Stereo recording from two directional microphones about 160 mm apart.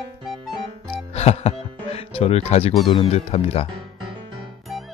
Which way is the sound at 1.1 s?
40° left (ahead or behind).